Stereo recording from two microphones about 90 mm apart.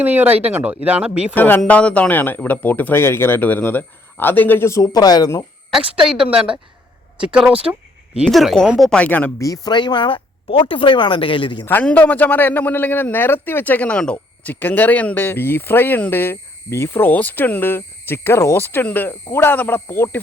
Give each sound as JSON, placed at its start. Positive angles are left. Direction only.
{"t": 0.0, "sound": "speech", "side_deg": -20}
{"t": 1.4, "sound": "speech", "side_deg": 20}
{"t": 4.8, "sound": "speech", "side_deg": 45}
{"t": 6.1, "sound": "speech", "side_deg": -10}
{"t": 8.2, "sound": "speech", "side_deg": 0}
{"t": 9.0, "sound": "speech", "side_deg": 20}
{"t": 9.4, "sound": "speech", "side_deg": 40}
{"t": 9.7, "sound": "speech", "side_deg": 60}
{"t": 11.6, "sound": "speech", "side_deg": 20}
{"t": 14.5, "sound": "speech", "side_deg": 20}